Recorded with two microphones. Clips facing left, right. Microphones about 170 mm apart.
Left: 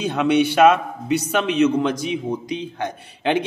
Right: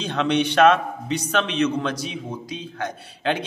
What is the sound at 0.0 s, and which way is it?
A man's voice, 10° left (ahead or behind).